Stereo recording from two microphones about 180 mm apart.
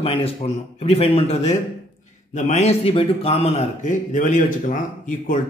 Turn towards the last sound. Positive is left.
turn(degrees=45)  # may be behind; listen again after turning